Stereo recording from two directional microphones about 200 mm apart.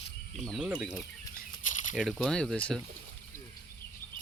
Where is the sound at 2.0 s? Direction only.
Centre (ahead or behind).